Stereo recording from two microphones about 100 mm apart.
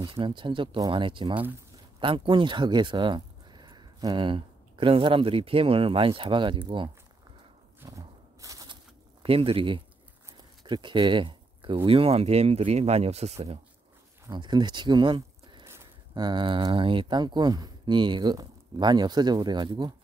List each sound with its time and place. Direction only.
0.0 s speech: 55° right (ahead or behind)
8.4 s a sound: 35° right (ahead or behind)
9.2 s speech: 65° right (ahead or behind); by 13.6 s 90° right
14.3 s speech: 45° right (ahead or behind)
15.6 s a sound: 25° right (ahead or behind)
16.2 s speech: 50° right (ahead or behind)